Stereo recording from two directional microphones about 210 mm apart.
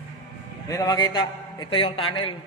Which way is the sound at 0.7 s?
15° left (ahead or behind).